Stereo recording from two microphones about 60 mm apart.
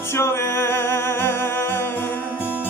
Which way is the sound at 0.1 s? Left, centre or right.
Left.